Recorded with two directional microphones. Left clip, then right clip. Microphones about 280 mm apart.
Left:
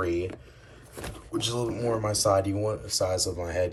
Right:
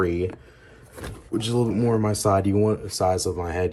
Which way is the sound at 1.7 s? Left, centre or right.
Centre.